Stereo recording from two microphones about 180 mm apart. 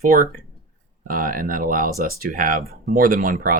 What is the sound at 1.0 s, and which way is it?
Speech, 50° right (ahead or behind).